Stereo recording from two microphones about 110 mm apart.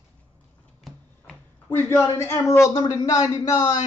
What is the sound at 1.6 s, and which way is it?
Speech, 25° left (ahead or behind).